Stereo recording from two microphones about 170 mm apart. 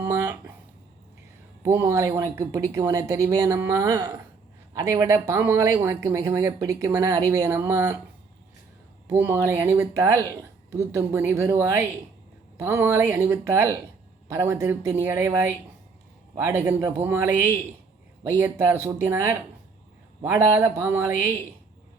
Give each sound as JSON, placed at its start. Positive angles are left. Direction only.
{"t": 0.0, "sound": "a sound", "side_deg": -15}
{"t": 1.6, "sound": "speech", "side_deg": -15}
{"t": 9.0, "sound": "speech", "side_deg": -10}